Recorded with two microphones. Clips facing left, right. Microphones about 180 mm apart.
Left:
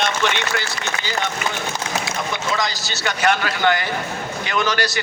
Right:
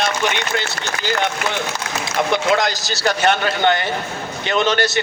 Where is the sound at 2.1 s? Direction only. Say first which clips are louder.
Right 11 dB; 70° right (ahead or behind).